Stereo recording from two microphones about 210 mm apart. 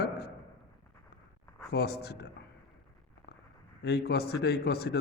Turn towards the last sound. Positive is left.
turn(degrees=50)  # may be behind; listen again after turning